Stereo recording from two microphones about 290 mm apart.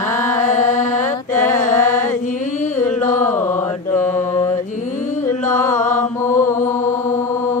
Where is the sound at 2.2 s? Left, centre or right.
Left.